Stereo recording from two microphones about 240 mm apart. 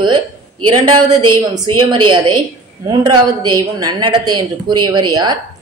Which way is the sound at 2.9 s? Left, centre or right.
Centre.